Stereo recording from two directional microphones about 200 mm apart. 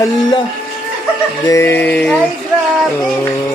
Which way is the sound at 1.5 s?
10° left (ahead or behind).